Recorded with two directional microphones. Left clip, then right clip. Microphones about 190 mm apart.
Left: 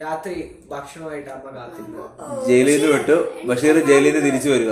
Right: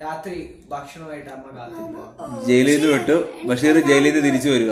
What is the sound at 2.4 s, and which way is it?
A man's voice, 15° right (ahead or behind).